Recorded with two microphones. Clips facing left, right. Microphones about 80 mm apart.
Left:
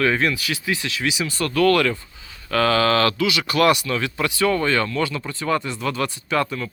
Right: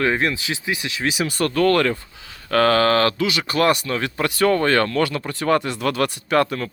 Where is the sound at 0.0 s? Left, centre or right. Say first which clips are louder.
Even; right.